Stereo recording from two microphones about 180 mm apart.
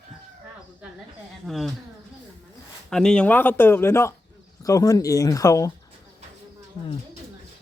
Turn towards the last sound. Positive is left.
turn(degrees=20)  # may be behind; listen again after turning